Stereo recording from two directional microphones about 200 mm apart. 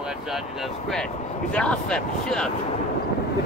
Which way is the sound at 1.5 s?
5° left (ahead or behind).